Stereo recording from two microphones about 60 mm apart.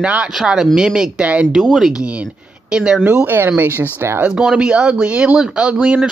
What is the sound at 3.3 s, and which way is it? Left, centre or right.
Speech, right.